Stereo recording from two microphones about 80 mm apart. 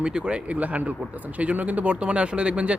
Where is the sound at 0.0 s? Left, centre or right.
Centre.